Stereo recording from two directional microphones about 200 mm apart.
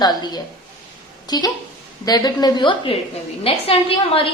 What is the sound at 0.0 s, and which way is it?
A woman's voice, 20° left (ahead or behind).